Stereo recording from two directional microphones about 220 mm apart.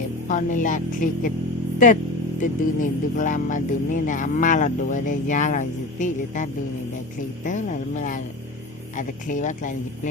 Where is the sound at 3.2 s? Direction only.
35° left (ahead or behind).